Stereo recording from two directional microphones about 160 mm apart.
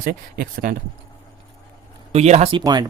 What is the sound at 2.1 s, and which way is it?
Speech, 40° right (ahead or behind).